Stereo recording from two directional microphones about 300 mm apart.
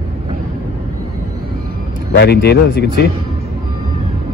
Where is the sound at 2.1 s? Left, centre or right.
Left.